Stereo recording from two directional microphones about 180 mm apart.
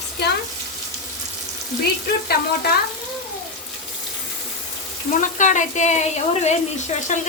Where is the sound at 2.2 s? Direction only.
60° left (ahead or behind).